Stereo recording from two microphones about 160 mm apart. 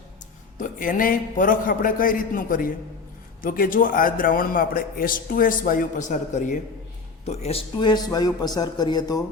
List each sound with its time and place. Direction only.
0.6 s a man's voice: 60° left (ahead or behind)
7.3 s speech: 40° left (ahead or behind)
7.8 s speech: 25° left (ahead or behind)